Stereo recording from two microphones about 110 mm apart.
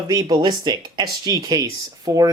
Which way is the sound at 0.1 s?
30° right (ahead or behind).